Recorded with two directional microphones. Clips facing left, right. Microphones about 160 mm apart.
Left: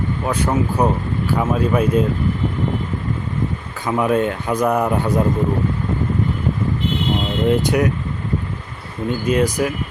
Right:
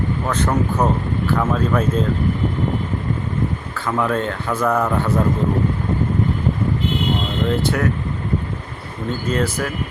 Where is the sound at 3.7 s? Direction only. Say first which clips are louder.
Left 4 dB; 15° left (ahead or behind).